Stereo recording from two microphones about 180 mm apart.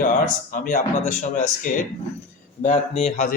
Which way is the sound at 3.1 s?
45° left (ahead or behind).